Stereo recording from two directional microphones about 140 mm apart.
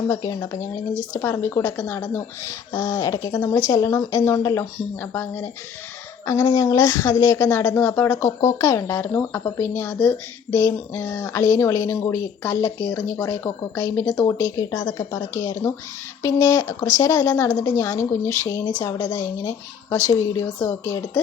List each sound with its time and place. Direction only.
0.1 s speech: 20° left (ahead or behind)
6.2 s speech: 25° left (ahead or behind)